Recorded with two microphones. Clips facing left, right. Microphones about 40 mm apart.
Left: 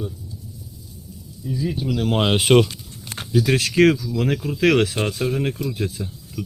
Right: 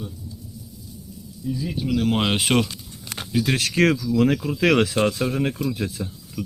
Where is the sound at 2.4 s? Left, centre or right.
Left.